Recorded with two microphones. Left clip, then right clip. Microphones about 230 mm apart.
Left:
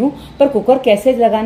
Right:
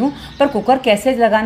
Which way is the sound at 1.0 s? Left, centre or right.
Right.